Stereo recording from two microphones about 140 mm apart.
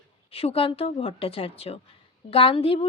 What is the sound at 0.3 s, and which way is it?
A woman's voice, 45° left (ahead or behind).